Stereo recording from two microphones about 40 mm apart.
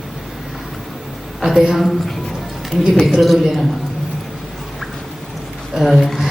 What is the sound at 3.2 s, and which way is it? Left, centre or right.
Speech, centre.